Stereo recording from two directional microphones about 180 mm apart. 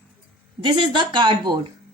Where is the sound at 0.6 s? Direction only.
25° right (ahead or behind).